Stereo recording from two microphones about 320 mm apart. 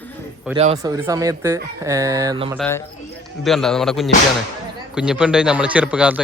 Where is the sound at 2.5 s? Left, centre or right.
Centre.